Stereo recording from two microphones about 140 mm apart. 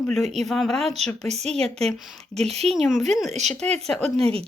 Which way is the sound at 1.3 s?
50° right (ahead or behind).